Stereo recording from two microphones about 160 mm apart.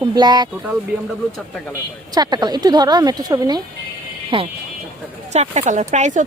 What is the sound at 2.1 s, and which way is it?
Speech, 25° right (ahead or behind).